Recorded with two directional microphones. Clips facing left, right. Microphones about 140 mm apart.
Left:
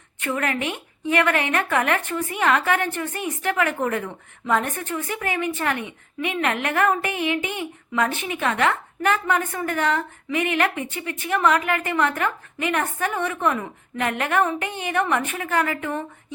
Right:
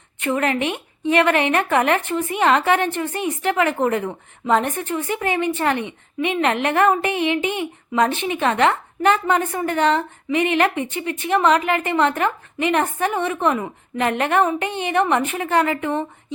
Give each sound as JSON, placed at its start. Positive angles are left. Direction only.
{"t": 0.2, "sound": "a woman's voice", "side_deg": -25}